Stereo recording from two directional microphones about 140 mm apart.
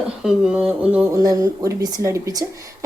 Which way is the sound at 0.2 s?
5° right (ahead or behind).